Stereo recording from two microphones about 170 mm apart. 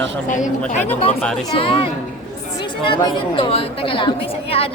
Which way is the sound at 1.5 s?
30° left (ahead or behind).